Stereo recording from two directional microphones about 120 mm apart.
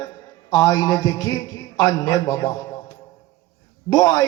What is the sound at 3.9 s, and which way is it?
Speech, 30° left (ahead or behind).